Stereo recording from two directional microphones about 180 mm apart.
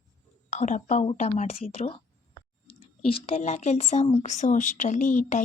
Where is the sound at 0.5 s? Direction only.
40° left (ahead or behind).